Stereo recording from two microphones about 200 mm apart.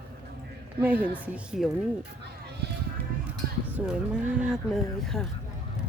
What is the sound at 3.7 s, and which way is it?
A woman's voice, 5° right (ahead or behind).